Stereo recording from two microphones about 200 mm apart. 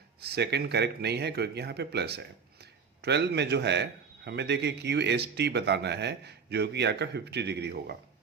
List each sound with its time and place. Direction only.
0.2 s speech: 55° right (ahead or behind)